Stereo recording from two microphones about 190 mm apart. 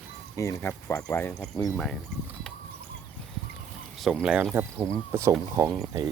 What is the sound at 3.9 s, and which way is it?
Speech, centre (ahead or behind).